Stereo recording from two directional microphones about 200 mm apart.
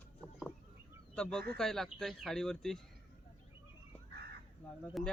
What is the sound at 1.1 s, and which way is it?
A man's voice, 5° left (ahead or behind).